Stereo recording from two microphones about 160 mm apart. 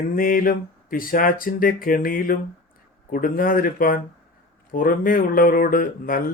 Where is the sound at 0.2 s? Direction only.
60° left (ahead or behind).